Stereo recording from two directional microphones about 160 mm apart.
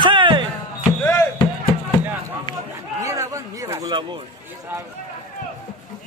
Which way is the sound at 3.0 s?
20° right (ahead or behind).